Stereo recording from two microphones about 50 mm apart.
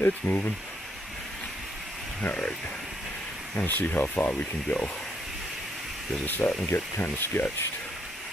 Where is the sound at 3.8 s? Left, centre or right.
Left.